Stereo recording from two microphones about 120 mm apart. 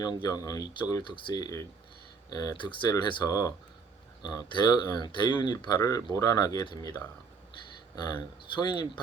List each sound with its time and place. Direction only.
0.0 s speech: 35° left (ahead or behind)
8.0 s speech: 35° left (ahead or behind)